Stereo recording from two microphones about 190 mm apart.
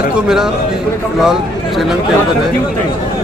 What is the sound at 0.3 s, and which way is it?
Speech, 5° right (ahead or behind).